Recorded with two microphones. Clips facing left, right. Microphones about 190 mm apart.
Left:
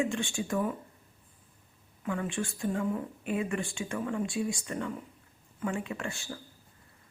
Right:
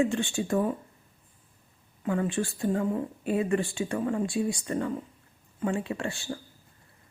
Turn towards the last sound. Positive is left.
turn(degrees=-30)  # may be behind; listen again after turning